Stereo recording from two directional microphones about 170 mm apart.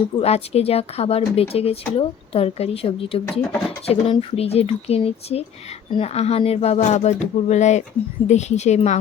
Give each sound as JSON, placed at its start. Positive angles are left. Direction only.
{"t": 0.2, "sound": "speech", "side_deg": 35}